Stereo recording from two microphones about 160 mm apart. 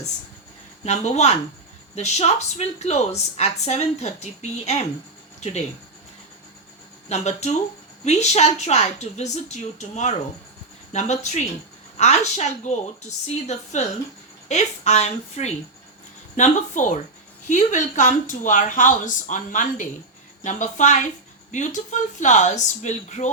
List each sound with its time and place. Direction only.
0.9 s a woman's voice: 45° left (ahead or behind)
7.1 s a woman's voice: 45° left (ahead or behind)